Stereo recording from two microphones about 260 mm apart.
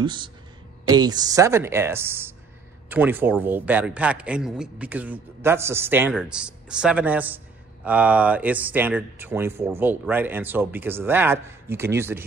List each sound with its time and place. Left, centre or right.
0.0 s a man's voice: centre